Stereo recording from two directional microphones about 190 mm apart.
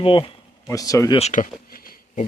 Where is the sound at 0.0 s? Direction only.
25° left (ahead or behind).